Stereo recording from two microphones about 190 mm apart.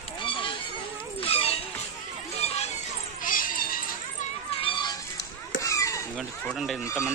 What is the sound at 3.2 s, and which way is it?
Cat, 45° left (ahead or behind).